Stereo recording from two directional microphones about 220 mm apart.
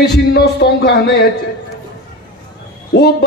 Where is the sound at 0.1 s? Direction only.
50° left (ahead or behind).